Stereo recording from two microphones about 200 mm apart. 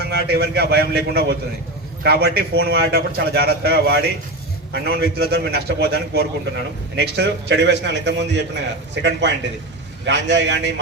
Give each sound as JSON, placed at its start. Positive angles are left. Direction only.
{"t": 0.1, "sound": "a man's voice", "side_deg": -55}